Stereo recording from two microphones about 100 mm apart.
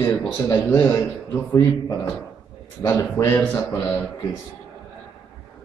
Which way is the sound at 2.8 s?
25° left (ahead or behind).